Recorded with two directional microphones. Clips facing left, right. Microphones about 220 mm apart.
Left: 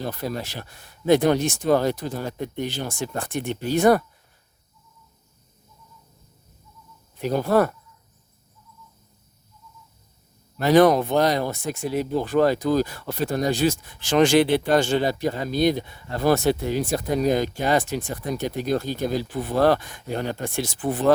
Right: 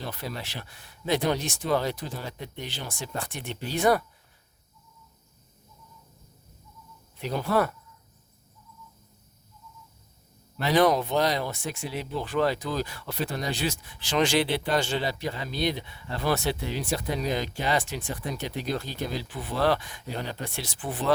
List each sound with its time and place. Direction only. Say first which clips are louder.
0.0 s speech: left 7 dB; 45° left (ahead or behind)
7.2 s speech: left 6 dB; 45° left (ahead or behind)
10.6 s speech: left 6 dB; 45° left (ahead or behind)